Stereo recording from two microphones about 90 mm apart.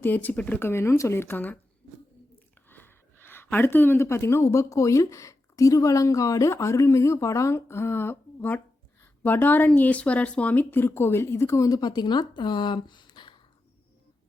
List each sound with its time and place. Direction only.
0.0 s speech: 20° left (ahead or behind)
0.6 s speech: 30° left (ahead or behind)
2.6 s speech: 25° left (ahead or behind)
11.8 s speech: 50° left (ahead or behind)